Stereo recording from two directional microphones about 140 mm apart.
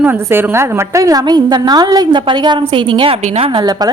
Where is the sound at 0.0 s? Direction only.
15° right (ahead or behind).